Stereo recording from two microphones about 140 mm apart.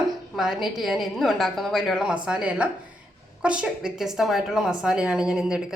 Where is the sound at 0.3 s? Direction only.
Centre (ahead or behind).